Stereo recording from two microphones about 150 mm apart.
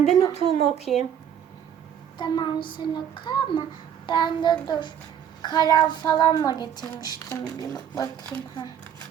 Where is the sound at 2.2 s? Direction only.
30° left (ahead or behind).